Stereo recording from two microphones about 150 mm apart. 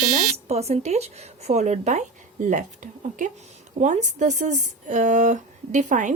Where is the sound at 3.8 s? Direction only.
55° right (ahead or behind).